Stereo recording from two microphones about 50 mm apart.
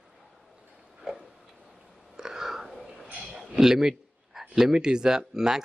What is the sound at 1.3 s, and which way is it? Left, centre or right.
Tick-tock, centre.